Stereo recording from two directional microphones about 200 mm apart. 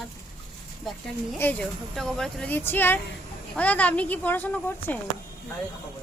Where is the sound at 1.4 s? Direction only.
10° left (ahead or behind).